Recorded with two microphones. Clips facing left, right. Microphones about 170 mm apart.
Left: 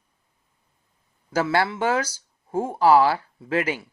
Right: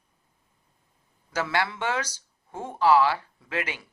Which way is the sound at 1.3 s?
30° left (ahead or behind).